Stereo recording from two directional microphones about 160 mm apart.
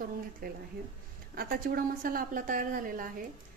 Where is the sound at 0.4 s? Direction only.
65° right (ahead or behind).